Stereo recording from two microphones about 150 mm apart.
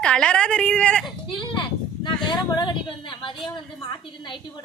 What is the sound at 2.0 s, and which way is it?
A woman's voice, 30° left (ahead or behind).